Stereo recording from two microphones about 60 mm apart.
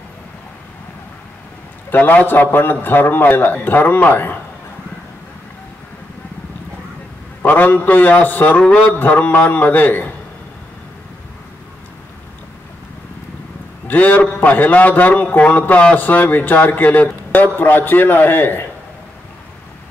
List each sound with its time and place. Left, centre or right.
1.9 s a man's voice: left
7.4 s a man's voice: left
8.6 s speech: centre
8.9 s a man's voice: left
13.8 s a man's voice: left